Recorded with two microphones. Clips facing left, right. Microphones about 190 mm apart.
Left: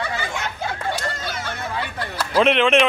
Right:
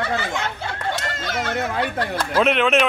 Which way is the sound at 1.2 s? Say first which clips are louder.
Right 5 dB; 80° right.